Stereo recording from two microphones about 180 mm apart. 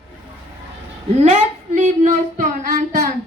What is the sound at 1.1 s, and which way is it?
Child singing, 40° right (ahead or behind).